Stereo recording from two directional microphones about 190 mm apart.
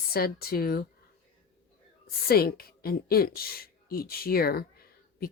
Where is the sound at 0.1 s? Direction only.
55° left (ahead or behind).